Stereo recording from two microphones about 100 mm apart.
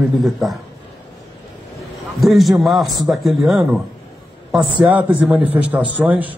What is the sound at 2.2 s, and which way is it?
A man's voice, centre (ahead or behind).